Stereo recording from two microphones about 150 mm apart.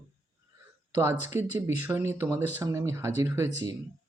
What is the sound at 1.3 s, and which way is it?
Speech, 15° right (ahead or behind).